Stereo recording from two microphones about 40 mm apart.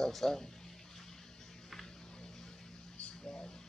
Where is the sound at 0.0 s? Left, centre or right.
Centre.